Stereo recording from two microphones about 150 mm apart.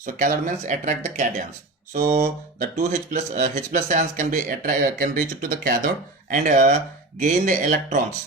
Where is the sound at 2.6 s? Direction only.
50° right (ahead or behind).